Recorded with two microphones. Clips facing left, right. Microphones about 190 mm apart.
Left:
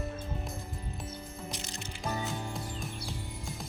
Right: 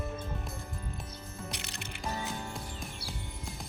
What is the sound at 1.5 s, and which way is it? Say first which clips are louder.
Music: left 1 dB; 65° right (ahead or behind).